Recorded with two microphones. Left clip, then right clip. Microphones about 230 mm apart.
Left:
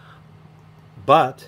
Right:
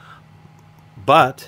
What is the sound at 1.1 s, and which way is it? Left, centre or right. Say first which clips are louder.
Speech: right 2 dB; right.